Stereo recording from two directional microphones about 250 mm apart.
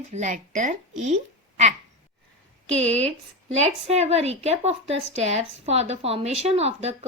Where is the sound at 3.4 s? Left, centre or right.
Right.